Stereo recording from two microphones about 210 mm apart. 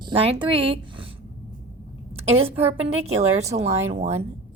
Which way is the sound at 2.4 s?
30° right (ahead or behind).